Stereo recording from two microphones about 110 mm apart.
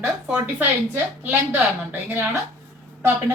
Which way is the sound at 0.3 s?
15° right (ahead or behind).